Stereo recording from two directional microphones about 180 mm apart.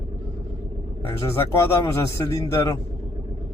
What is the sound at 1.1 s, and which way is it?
Speech, 15° left (ahead or behind).